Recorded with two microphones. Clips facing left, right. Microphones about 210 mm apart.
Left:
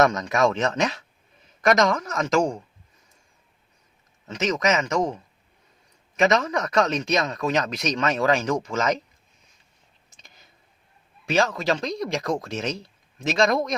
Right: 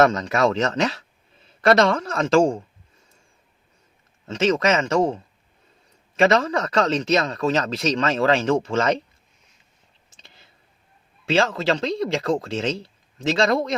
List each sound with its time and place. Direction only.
0.0 s speech: 30° right (ahead or behind)
1.5 s a man's voice: 30° right (ahead or behind)
4.4 s a man's voice: 30° right (ahead or behind)
11.3 s speech: 30° right (ahead or behind)